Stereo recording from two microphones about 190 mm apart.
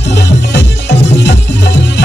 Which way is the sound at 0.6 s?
65° left (ahead or behind).